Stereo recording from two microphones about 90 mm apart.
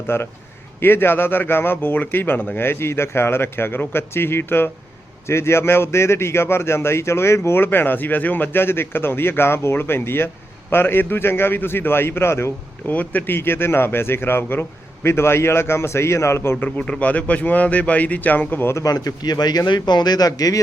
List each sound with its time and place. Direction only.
0.1 s a man's voice: 25° left (ahead or behind)
16.6 s speech: 10° left (ahead or behind); by 18.9 s 30° left (ahead or behind)
18.9 s a man's voice: 45° left (ahead or behind)